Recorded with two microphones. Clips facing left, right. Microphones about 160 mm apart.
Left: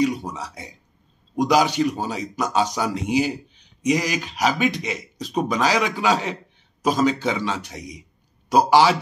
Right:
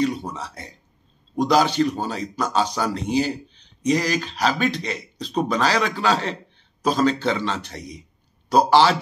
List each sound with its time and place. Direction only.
0.0 s a man's voice: 15° left (ahead or behind)